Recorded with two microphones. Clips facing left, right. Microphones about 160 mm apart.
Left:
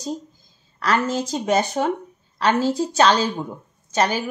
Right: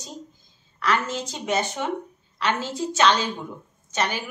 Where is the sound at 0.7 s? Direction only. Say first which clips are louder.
Left 4 dB; 40° left (ahead or behind).